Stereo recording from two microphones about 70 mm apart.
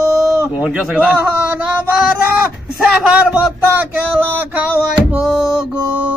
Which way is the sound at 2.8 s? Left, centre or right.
Centre.